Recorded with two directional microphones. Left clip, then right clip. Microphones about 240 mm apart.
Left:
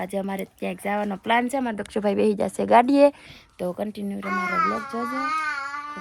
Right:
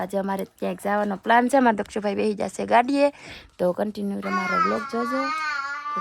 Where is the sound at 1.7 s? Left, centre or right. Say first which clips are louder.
Left 1 dB; centre.